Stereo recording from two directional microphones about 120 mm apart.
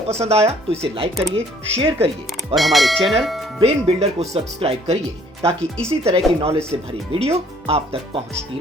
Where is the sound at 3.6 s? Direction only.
60° right (ahead or behind).